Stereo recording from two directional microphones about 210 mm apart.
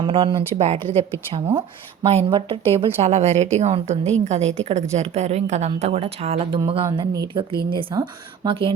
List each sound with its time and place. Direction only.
0.0 s a woman's voice: 25° right (ahead or behind)
1.5 s speech: 15° right (ahead or behind)
2.0 s a woman's voice: 30° right (ahead or behind)